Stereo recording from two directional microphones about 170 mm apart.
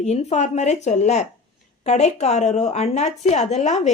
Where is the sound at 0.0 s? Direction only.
40° left (ahead or behind).